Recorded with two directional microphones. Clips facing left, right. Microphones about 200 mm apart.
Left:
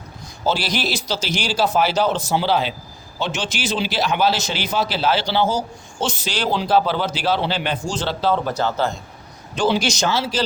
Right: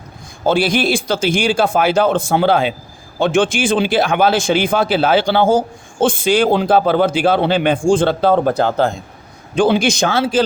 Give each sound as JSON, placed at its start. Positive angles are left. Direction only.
{"t": 0.4, "sound": "speech", "side_deg": -50}